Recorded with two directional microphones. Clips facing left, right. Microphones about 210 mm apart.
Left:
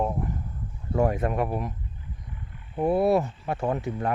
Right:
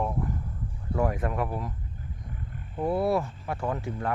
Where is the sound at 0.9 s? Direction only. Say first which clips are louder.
Left 4 dB; 25° left (ahead or behind).